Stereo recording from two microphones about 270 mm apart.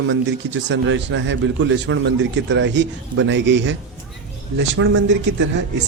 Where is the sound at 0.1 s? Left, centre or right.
Right.